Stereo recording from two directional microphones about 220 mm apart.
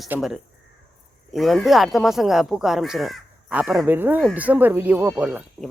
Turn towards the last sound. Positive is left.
turn(degrees=-5)  # may be behind; listen again after turning